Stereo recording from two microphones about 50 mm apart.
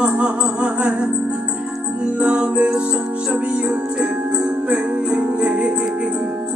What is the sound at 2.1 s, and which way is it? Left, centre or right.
Music, right.